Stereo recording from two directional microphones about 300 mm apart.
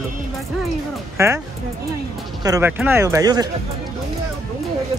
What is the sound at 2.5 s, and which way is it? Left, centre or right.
Speech, centre.